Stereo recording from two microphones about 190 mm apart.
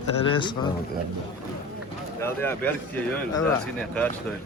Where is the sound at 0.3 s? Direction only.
25° left (ahead or behind).